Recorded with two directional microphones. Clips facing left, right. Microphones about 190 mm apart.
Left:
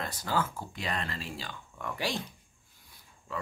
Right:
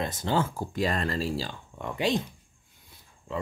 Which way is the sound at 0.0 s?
25° right (ahead or behind).